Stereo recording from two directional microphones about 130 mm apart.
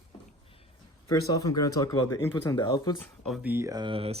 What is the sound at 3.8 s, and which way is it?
Speech, 45° right (ahead or behind).